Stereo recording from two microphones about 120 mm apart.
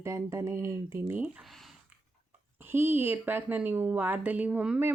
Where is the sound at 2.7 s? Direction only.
20° right (ahead or behind).